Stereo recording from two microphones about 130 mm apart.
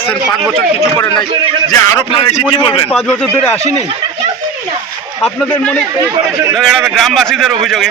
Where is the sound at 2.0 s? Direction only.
45° left (ahead or behind).